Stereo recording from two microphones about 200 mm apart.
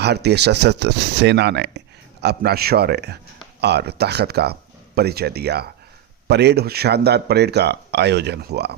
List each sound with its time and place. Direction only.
0.0 s speech: 55° right (ahead or behind)